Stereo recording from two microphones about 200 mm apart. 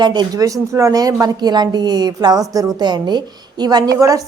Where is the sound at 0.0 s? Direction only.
20° right (ahead or behind).